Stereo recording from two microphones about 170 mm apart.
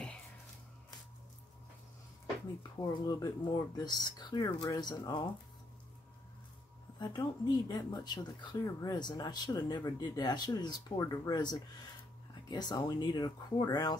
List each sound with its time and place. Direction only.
2.6 s speech: 25° left (ahead or behind)
7.0 s speech: 25° left (ahead or behind)